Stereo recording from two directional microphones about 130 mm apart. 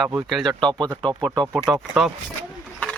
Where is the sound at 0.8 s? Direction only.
35° right (ahead or behind).